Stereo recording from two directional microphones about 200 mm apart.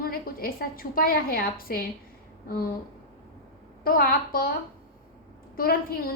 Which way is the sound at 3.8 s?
45° left (ahead or behind).